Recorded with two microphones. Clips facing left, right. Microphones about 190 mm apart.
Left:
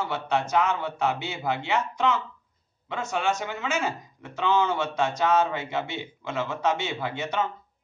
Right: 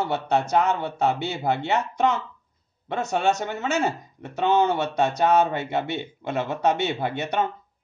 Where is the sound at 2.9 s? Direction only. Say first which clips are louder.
Right 4 dB; 65° right (ahead or behind).